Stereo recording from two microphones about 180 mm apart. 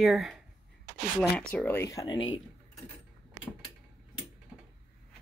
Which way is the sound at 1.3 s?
10° left (ahead or behind).